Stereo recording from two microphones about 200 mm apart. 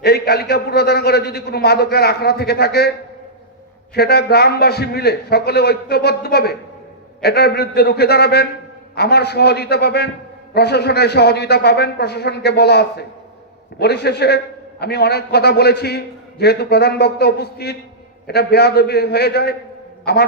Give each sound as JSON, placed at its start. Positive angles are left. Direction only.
{"t": 0.0, "sound": "a man's voice", "side_deg": 55}
{"t": 3.9, "sound": "a man's voice", "side_deg": 55}